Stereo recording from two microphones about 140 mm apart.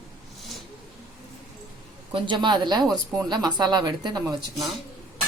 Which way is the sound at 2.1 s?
35° right (ahead or behind).